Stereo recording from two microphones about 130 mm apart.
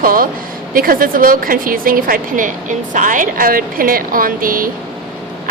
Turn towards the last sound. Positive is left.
turn(degrees=-90)